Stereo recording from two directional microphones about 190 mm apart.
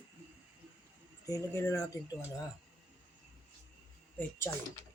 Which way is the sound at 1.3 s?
15° left (ahead or behind).